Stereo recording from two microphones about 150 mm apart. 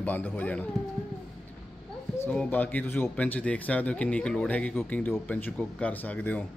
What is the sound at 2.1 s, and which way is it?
Speech, 10° left (ahead or behind).